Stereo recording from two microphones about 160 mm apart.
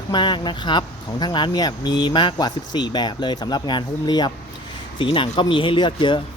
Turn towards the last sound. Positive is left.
turn(degrees=30)  # may be behind; listen again after turning